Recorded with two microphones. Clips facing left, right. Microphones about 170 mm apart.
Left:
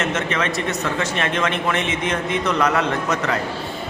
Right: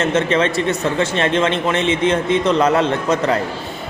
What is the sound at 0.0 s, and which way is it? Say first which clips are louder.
A man's voice: right 6 dB; 30° right (ahead or behind).